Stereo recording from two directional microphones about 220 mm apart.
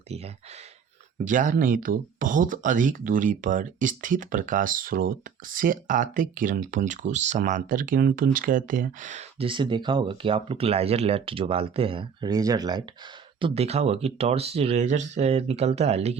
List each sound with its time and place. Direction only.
1.2 s speech: 35° right (ahead or behind)